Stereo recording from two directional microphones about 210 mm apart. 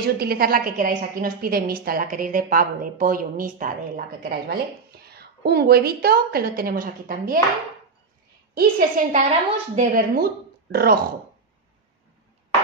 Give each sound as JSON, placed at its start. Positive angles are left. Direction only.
{"t": 0.0, "sound": "a woman's voice", "side_deg": -45}
{"t": 8.5, "sound": "a woman's voice", "side_deg": -45}